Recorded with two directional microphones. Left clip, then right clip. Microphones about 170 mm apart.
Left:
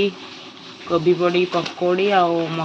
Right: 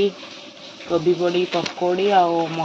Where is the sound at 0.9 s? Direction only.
5° left (ahead or behind).